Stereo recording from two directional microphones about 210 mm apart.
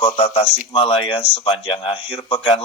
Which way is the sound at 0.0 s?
25° left (ahead or behind).